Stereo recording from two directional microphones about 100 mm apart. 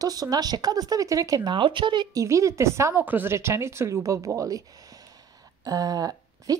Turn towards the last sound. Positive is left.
turn(degrees=-40)  # may be behind; listen again after turning